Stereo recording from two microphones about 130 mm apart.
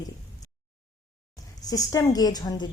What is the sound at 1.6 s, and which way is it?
A woman's voice, 30° left (ahead or behind).